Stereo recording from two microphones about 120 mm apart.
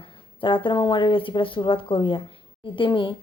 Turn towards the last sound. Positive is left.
turn(degrees=45)  # may be behind; listen again after turning